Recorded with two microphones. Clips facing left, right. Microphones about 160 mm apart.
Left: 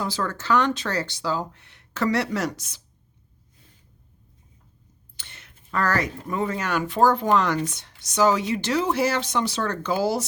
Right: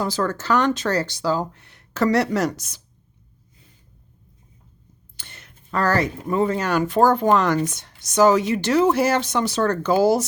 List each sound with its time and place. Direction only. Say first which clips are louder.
0.0 s speech: right 5 dB; 45° right (ahead or behind)
5.1 s speech: right 3 dB; 45° right (ahead or behind)